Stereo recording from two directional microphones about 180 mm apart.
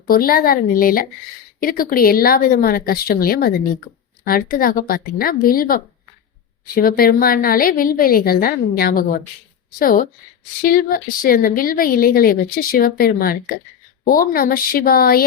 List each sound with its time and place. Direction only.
0.1 s a woman's voice: 55° left (ahead or behind)